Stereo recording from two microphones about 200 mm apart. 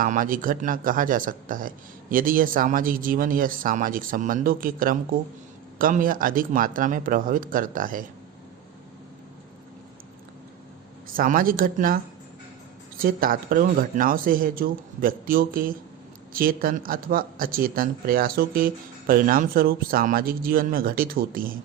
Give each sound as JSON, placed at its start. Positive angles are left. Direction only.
{"t": 0.0, "sound": "speech", "side_deg": -45}
{"t": 11.1, "sound": "speech", "side_deg": -45}
{"t": 13.0, "sound": "speech", "side_deg": -45}